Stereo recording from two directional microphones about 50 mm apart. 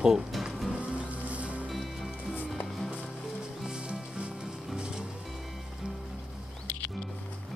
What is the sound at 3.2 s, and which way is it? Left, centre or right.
Music, centre.